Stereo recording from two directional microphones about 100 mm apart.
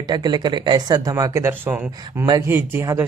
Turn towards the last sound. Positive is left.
turn(degrees=-25)  # may be behind; listen again after turning